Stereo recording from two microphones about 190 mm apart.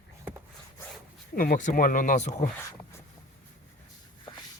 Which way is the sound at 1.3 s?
50° left (ahead or behind).